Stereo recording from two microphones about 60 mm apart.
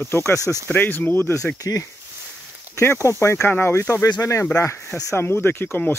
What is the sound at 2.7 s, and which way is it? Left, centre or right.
Speech, left.